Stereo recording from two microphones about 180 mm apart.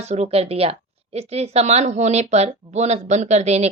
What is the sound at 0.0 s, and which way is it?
Speech, 35° right (ahead or behind).